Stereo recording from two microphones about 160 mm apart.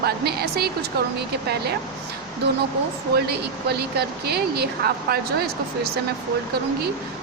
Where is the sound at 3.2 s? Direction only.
90° right; by 5.9 s 75° right (ahead or behind).